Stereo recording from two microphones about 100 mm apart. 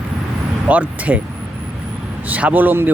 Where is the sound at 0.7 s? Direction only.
15° right (ahead or behind).